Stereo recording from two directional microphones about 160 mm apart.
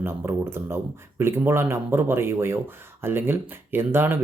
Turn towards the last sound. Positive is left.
turn(degrees=-15)  # may be behind; listen again after turning